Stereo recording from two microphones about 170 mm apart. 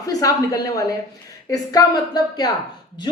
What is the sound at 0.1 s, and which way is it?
A woman's voice, 20° left (ahead or behind).